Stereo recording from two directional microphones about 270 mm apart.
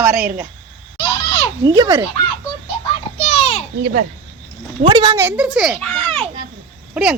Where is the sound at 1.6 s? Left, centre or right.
Centre.